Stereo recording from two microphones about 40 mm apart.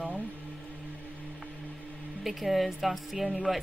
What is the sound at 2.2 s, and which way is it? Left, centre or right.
Speech, centre.